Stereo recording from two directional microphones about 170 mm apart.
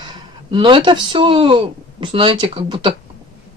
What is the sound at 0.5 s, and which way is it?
Speech, 30° right (ahead or behind).